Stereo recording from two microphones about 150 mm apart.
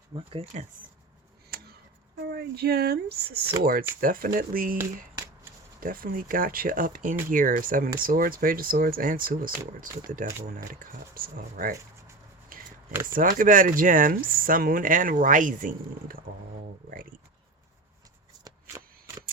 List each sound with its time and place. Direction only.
0.1 s speech: 35° right (ahead or behind)
1.5 s a sound: 90° right
2.2 s speech: 90° right
3.6 s speech: 75° right (ahead or behind)
5.8 s speech: 75° right (ahead or behind)
12.5 s a sound: 70° right (ahead or behind)
13.1 s speech: 65° right (ahead or behind)
18.4 s shuffling cards: 20° right (ahead or behind)